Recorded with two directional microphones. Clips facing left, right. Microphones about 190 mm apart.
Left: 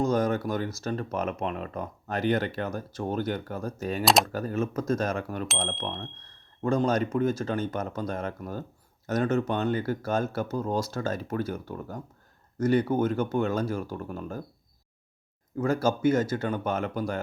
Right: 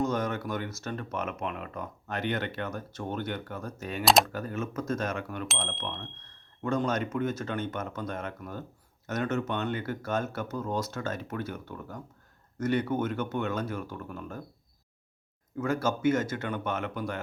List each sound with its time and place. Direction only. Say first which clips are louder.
0.0 s speech: left 4 dB; 35° left (ahead or behind)
4.0 s speech: even; centre (ahead or behind)
4.3 s speech: left 5 dB; 35° left (ahead or behind)
15.5 s speech: left 4 dB; 35° left (ahead or behind)